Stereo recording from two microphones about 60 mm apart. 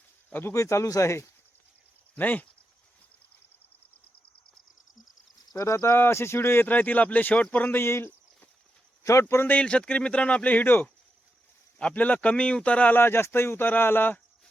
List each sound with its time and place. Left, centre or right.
0.5 s speech: left
2.1 s speech: left
5.5 s speech: left
6.0 s speech: left
6.7 s speech: left
7.7 s speech: left
9.5 s speech: centre
13.0 s speech: left